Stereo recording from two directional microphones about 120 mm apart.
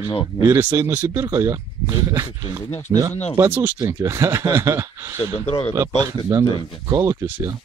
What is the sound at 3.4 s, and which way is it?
Speech, 20° right (ahead or behind).